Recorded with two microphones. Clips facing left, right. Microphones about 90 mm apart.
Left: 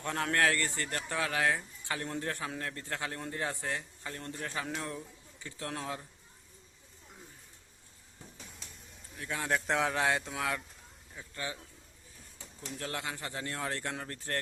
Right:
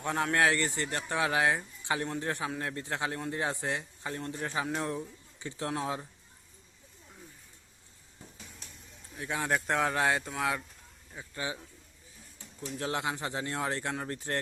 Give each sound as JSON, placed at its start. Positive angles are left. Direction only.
{"t": 0.0, "sound": "a man's voice", "side_deg": -10}
{"t": 4.9, "sound": "speech", "side_deg": -25}
{"t": 9.1, "sound": "speech", "side_deg": -15}
{"t": 11.1, "sound": "speech", "side_deg": -20}
{"t": 12.8, "sound": "a man's voice", "side_deg": -20}